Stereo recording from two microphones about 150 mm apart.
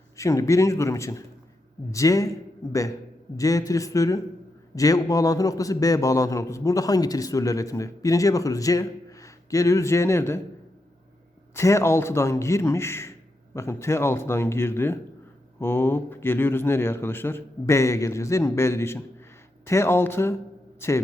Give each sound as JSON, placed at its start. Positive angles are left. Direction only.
{"t": 0.2, "sound": "a man's voice", "side_deg": 20}
{"t": 3.3, "sound": "a man's voice", "side_deg": 20}
{"t": 11.5, "sound": "a man's voice", "side_deg": 20}